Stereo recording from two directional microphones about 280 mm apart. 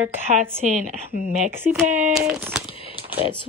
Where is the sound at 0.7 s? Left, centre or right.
Right.